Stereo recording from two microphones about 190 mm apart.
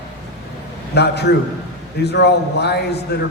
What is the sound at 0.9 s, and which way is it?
Speech, 60° left (ahead or behind).